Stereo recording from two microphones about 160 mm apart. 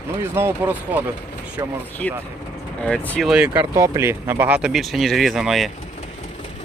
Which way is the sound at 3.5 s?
20° right (ahead or behind).